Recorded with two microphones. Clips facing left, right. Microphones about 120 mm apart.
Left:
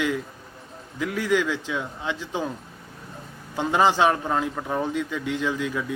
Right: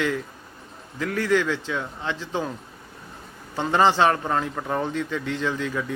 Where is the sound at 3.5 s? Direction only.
10° left (ahead or behind).